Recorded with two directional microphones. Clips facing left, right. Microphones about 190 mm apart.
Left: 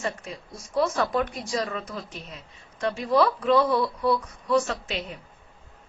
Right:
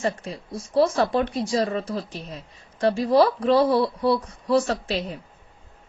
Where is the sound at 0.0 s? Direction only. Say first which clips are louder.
Right 5 dB; 30° right (ahead or behind).